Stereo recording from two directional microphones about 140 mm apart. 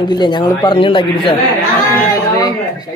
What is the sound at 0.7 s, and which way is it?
Speech, 40° left (ahead or behind).